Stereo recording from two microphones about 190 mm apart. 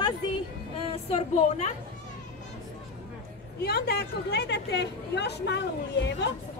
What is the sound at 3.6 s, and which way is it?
A woman's voice, 55° left (ahead or behind).